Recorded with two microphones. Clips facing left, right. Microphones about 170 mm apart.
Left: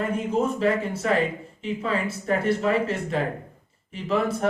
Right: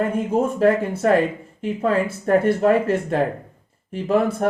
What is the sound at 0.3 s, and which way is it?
Speech, 50° right (ahead or behind).